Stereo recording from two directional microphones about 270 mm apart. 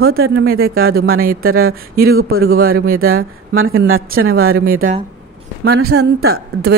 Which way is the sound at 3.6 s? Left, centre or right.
Right.